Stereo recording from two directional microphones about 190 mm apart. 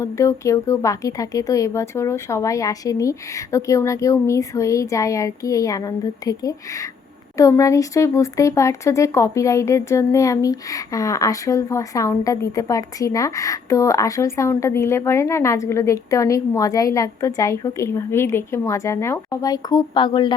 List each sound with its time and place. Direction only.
0.0 s speech: 15° left (ahead or behind)